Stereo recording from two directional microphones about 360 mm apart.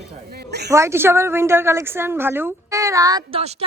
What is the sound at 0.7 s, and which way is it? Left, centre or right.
A woman's voice, centre.